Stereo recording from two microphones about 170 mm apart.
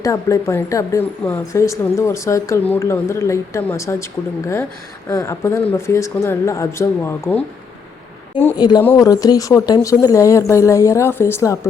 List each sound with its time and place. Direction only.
0.0 s speech: 20° left (ahead or behind)
5.0 s speech: 15° left (ahead or behind)
8.5 s speech: 25° left (ahead or behind)